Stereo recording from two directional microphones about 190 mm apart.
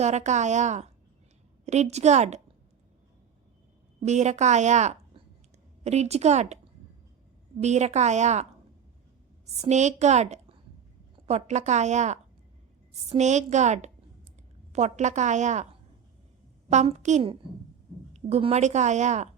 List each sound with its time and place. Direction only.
0.0 s a woman's voice: 35° right (ahead or behind)
4.0 s a woman's voice: 35° right (ahead or behind)
7.6 s a woman's voice: 35° right (ahead or behind)
9.6 s a woman's voice: 35° right (ahead or behind)
16.6 s a woman's voice: 35° right (ahead or behind)